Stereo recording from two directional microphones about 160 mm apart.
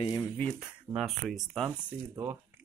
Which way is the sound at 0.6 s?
5° right (ahead or behind).